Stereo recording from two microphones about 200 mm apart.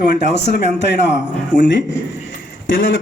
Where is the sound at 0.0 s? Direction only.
50° left (ahead or behind).